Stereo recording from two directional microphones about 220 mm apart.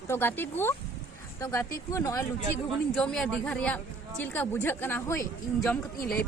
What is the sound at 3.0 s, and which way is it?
Speech, 5° left (ahead or behind).